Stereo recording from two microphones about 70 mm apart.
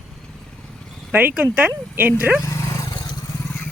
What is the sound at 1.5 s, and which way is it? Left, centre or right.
Speech, right.